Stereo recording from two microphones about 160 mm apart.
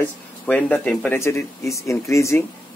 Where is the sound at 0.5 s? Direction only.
10° left (ahead or behind).